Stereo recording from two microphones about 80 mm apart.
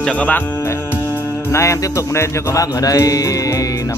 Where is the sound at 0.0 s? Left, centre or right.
Centre.